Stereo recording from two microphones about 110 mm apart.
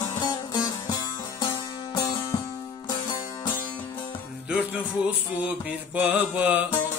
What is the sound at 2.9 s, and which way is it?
Music, 45° left (ahead or behind).